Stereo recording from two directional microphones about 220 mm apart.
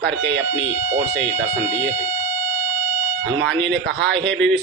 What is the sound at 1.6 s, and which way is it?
Speech, 5° left (ahead or behind).